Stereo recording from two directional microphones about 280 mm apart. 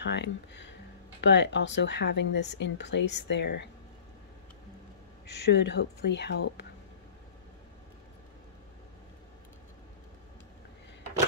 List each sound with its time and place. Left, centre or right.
0.0 s speech: left
5.2 s speech: left